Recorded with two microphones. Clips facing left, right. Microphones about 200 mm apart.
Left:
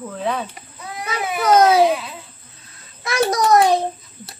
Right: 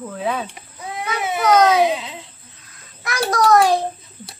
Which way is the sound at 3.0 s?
25° left (ahead or behind).